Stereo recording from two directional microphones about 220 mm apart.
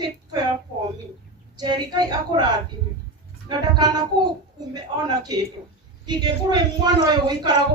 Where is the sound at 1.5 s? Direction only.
20° right (ahead or behind).